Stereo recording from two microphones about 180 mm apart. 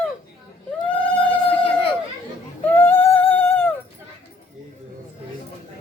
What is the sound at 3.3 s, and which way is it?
Dog, 10° left (ahead or behind).